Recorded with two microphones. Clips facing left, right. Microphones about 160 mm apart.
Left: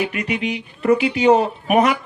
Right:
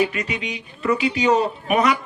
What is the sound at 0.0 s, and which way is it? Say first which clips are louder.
A woman's voice: left 1 dB; 60° left (ahead or behind).